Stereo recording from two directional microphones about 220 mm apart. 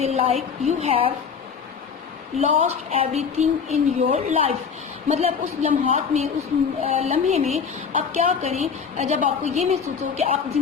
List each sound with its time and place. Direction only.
0.0 s speech: 30° right (ahead or behind)
2.4 s a woman's voice: 30° right (ahead or behind)